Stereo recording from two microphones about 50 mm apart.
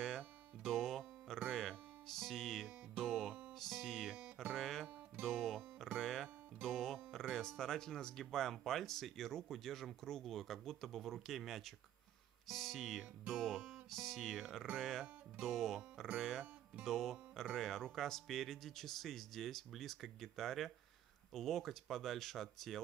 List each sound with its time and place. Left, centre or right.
0.7 s music: centre
3.9 s music: centre
4.6 s music: centre
7.3 s speech: centre
12.4 s music: centre
13.3 s speech: centre